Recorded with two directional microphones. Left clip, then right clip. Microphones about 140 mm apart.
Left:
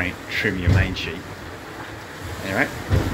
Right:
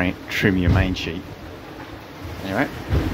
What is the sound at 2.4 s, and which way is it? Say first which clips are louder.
Speech: left 1 dB; 15° right (ahead or behind).